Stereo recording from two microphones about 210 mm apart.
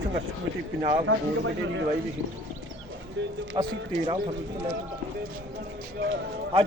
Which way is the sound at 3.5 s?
25° right (ahead or behind).